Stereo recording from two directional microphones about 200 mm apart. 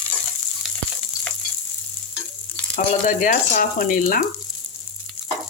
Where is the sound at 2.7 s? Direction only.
40° left (ahead or behind).